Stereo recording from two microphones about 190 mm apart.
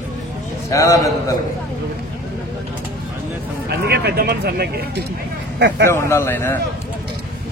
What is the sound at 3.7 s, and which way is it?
Speech, 55° right (ahead or behind).